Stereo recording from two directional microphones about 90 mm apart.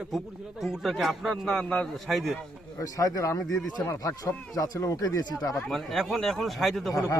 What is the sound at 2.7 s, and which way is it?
Speech, 40° left (ahead or behind).